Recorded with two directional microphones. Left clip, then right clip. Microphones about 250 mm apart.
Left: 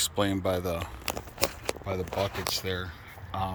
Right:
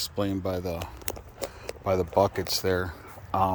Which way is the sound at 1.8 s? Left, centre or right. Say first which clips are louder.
Right 9 dB; right.